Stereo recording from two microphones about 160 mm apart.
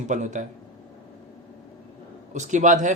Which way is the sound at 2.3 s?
50° right (ahead or behind).